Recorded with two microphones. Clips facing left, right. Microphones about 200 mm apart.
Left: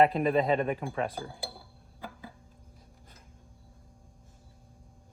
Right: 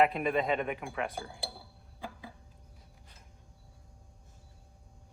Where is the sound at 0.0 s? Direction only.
30° left (ahead or behind).